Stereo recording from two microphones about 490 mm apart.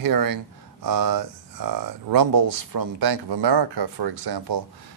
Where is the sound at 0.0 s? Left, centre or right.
Right.